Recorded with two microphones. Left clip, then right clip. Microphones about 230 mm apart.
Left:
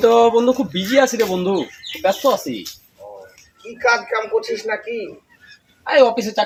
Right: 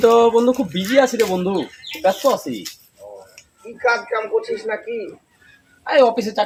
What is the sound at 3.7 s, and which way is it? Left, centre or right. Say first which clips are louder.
Speech: left 2 dB; left.